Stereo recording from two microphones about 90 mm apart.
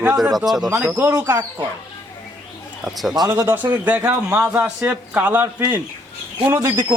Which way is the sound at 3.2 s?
45° right (ahead or behind).